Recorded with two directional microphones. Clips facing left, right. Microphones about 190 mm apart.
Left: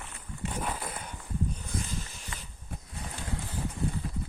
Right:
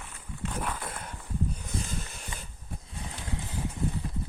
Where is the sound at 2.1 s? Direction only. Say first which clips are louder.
Right 2 dB; 55° right (ahead or behind).